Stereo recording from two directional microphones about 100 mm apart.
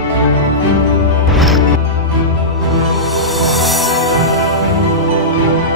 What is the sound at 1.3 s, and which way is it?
Music, centre (ahead or behind).